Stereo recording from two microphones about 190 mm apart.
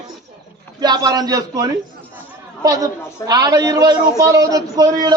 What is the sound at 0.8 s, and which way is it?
A man's voice, 20° right (ahead or behind).